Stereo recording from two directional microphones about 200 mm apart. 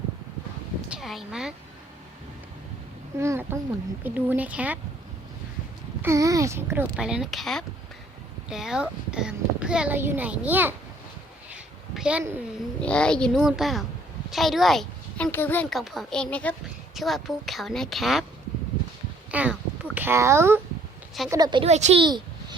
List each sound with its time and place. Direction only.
0.9 s speech: centre (ahead or behind)
3.2 s speech: 10° right (ahead or behind)
6.0 s a woman's voice: 15° right (ahead or behind)
11.5 s a sound: 5° right (ahead or behind)
12.8 s a woman's voice: 5° left (ahead or behind)
19.3 s a child's voice: 5° right (ahead or behind); by 22.0 s 35° right (ahead or behind)
22.0 s a sound: 20° right (ahead or behind)